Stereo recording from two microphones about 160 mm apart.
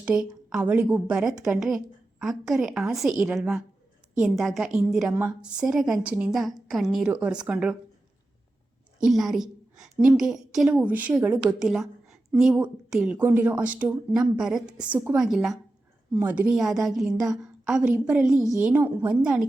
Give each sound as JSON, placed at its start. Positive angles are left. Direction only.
{"t": 0.0, "sound": "a woman's voice", "side_deg": -5}
{"t": 9.0, "sound": "a woman's voice", "side_deg": 0}
{"t": 18.3, "sound": "a woman's voice", "side_deg": 20}
{"t": 18.6, "sound": "speech", "side_deg": -10}